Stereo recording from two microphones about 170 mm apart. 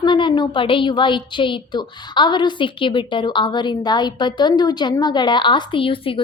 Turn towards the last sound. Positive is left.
turn(degrees=30)  # may be behind; listen again after turning